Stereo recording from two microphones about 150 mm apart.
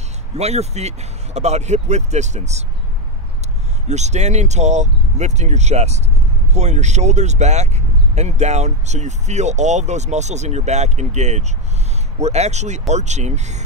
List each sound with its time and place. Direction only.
0.4 s speech: 45° right (ahead or behind)
3.8 s speech: 50° right (ahead or behind)